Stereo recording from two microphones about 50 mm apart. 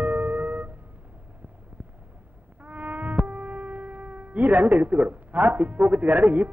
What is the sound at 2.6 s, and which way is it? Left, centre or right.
Foghorn, right.